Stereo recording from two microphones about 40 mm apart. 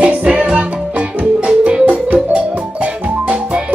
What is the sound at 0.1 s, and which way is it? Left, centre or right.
Music, right.